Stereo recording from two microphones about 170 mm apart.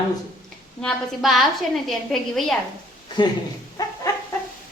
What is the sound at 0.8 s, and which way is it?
A woman's voice, centre (ahead or behind).